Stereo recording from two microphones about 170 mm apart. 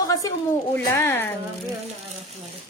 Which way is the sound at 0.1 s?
20° left (ahead or behind).